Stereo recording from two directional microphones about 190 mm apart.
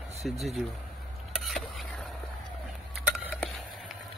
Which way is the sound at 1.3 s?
Centre (ahead or behind).